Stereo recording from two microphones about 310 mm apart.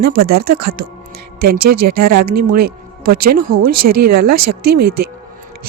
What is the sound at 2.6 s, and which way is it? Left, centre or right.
Speech, right.